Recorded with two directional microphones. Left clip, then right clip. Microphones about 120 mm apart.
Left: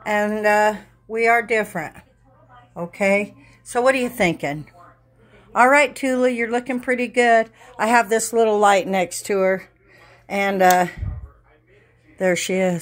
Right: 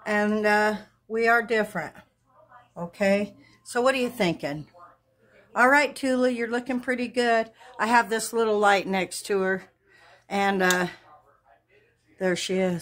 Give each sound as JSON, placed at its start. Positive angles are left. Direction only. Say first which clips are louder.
{"t": 0.0, "sound": "a woman's voice", "louder": "left 5 dB", "side_deg": 5}
{"t": 3.7, "sound": "a woman's voice", "louder": "left 5 dB", "side_deg": 20}
{"t": 12.2, "sound": "a woman's voice", "louder": "left 6 dB", "side_deg": 20}